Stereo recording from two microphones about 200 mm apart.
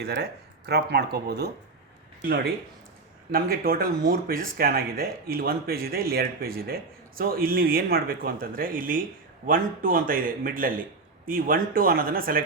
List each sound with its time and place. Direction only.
0.0 s speech: 50° right (ahead or behind)